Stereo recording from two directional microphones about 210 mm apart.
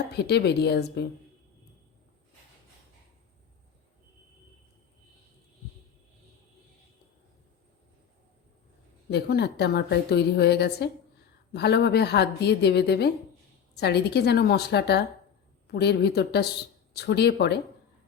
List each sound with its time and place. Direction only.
0.1 s a woman's voice: 50° left (ahead or behind)
9.0 s a woman's voice: 50° left (ahead or behind)